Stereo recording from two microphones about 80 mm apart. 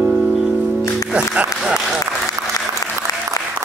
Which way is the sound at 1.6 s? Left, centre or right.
Centre.